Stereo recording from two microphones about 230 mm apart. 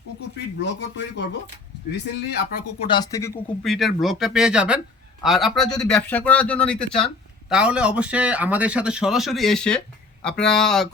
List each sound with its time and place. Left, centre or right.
0.6 s speech: left
2.8 s speech: centre
3.6 s speech: centre